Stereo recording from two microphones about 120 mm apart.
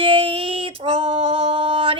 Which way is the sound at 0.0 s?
50° right (ahead or behind).